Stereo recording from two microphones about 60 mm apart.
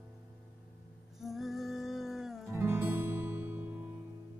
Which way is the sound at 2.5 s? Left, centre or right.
Right.